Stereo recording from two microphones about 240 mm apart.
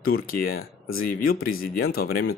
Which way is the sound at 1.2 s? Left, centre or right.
Left.